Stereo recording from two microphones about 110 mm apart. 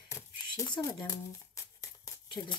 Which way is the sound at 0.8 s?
30° left (ahead or behind).